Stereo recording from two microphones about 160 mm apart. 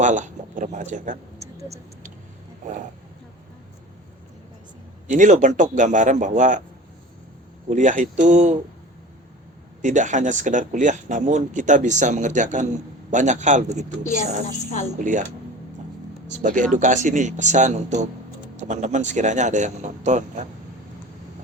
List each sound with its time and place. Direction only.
0.0 s speech: 50° right (ahead or behind)
1.4 s a sound: 20° right (ahead or behind)
5.0 s speech: 50° right (ahead or behind)
7.7 s speech: 50° right (ahead or behind)
9.8 s speech: 50° right (ahead or behind)
14.8 s speech: 50° right (ahead or behind)
16.3 s speech: 50° right (ahead or behind)